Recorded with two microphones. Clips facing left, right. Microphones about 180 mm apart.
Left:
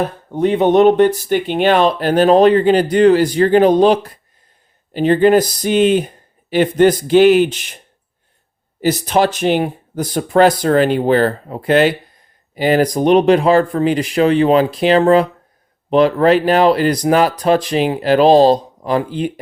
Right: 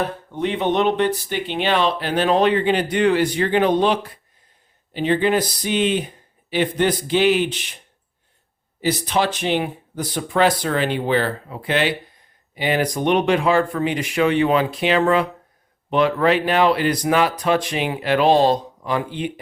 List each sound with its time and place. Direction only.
0.3 s speech: 45° left (ahead or behind)
8.8 s speech: 45° left (ahead or behind)